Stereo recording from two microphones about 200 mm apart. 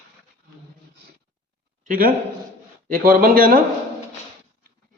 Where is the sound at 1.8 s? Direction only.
45° right (ahead or behind).